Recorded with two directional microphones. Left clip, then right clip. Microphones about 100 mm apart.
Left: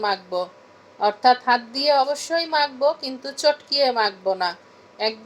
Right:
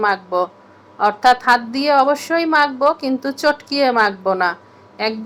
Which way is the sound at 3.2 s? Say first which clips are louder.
Right 7 dB; 30° left (ahead or behind).